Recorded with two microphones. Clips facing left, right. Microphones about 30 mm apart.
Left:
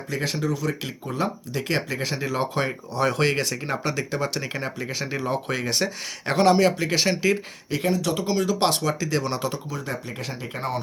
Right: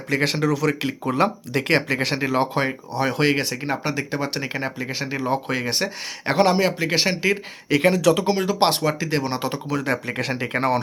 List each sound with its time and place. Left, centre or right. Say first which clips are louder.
0.1 s speech: right 6 dB; right
1.0 s speech: right 6 dB; right
2.2 s speech: right 2 dB; right
5.0 s speech: right 3 dB; centre
7.7 s speech: right 7 dB; right
8.2 s speech: right 3 dB; right
9.6 s speech: right 7 dB; right